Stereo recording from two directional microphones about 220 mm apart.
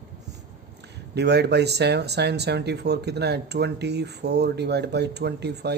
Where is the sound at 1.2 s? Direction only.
50° right (ahead or behind).